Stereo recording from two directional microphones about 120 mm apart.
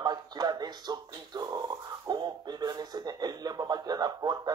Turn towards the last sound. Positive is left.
turn(degrees=-35)  # may be behind; listen again after turning